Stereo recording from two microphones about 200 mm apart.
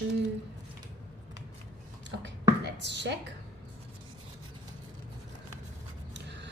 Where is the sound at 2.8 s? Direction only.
60° right (ahead or behind).